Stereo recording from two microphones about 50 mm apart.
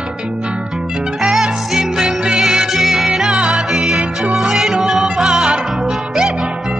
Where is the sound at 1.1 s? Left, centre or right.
Centre.